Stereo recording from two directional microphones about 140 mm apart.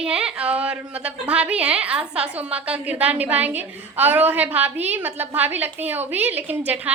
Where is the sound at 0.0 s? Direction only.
5° right (ahead or behind).